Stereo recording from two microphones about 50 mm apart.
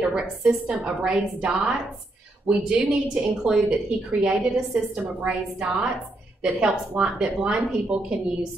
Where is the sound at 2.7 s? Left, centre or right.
Right.